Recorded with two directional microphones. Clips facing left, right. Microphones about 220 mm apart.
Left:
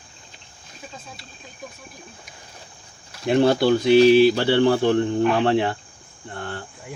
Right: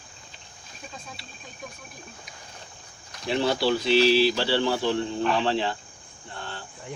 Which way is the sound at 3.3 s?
55° left (ahead or behind).